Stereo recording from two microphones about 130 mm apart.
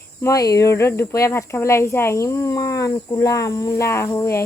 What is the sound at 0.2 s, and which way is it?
Speech, 25° left (ahead or behind).